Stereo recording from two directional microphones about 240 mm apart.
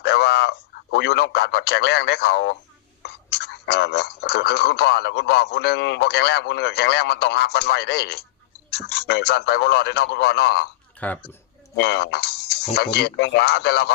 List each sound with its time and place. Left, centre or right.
0.0 s a man's voice: left
11.0 s speech: centre
11.8 s speech: left